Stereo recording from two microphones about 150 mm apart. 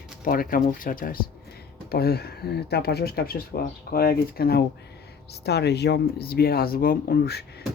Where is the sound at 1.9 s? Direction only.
90° left.